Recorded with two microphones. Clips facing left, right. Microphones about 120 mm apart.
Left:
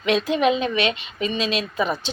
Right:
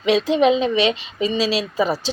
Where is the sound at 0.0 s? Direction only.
30° right (ahead or behind).